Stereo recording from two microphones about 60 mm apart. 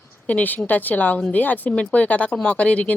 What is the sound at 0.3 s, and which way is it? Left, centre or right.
Speech, left.